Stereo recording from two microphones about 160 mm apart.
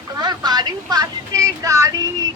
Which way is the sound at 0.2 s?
25° right (ahead or behind).